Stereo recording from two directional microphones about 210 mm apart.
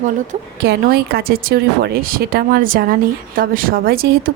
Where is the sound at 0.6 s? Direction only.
50° right (ahead or behind).